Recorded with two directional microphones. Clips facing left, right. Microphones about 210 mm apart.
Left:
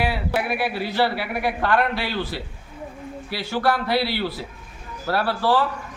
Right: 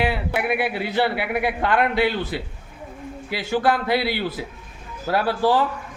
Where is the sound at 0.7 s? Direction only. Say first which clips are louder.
Even; 20° right (ahead or behind).